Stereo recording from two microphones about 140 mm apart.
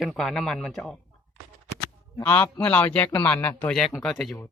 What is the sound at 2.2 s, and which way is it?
A man's voice, 10° left (ahead or behind).